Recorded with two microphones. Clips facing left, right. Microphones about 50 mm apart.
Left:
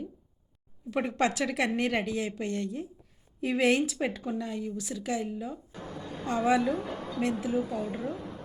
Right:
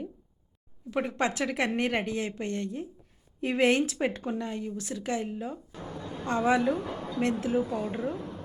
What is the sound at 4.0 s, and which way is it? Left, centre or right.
Speech, centre.